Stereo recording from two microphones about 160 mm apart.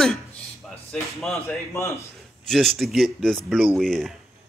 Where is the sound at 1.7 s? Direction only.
20° left (ahead or behind).